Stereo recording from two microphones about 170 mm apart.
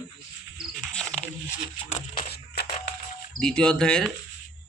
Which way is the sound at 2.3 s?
70° left (ahead or behind).